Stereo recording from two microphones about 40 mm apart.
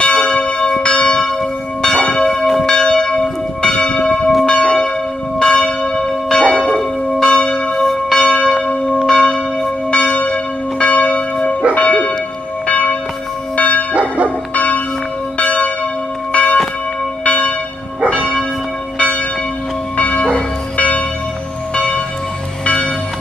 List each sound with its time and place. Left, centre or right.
0.0 s church bell: left
2.2 s church bell: centre
2.7 s church bell: centre
7.8 s church bell: centre
8.2 s church bell: left
9.8 s church bell: left
11.7 s bow-wow: left
12.6 s church bell: left
13.9 s bow-wow: right
14.5 s church bell: left
18.0 s church bell: right
18.9 s church bell: left
20.0 s train: left